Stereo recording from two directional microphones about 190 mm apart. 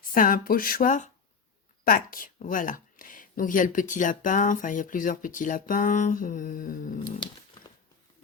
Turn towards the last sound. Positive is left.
turn(degrees=45)  # may be behind; listen again after turning